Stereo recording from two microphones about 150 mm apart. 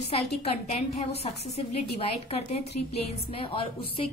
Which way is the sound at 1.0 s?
45° left (ahead or behind).